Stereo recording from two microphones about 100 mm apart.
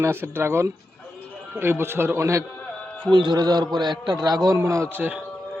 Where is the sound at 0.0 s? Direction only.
20° right (ahead or behind).